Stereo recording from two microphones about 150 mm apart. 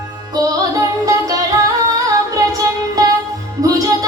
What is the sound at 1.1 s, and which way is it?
Music, 20° right (ahead or behind).